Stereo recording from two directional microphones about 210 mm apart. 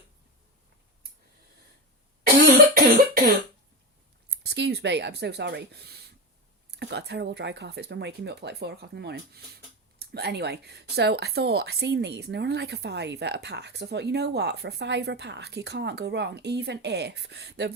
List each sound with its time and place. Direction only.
2.2 s cough: 45° right (ahead or behind)
4.4 s speech: 55° right (ahead or behind)